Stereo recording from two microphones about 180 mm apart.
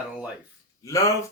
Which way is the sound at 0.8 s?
20° left (ahead or behind).